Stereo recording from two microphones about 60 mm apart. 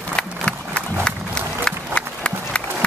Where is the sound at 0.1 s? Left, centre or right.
Centre.